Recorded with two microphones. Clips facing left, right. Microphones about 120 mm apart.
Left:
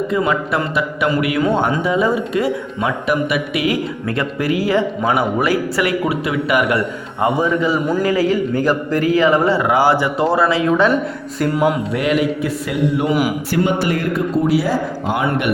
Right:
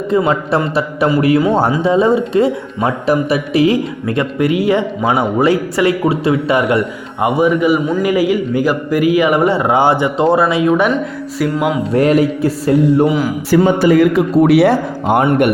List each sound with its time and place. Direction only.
0.1 s music: 30° right (ahead or behind)
1.8 s speech: 30° right (ahead or behind)
11.9 s music: 40° right (ahead or behind)
13.5 s speech: 90° right; by 15.3 s 55° right (ahead or behind)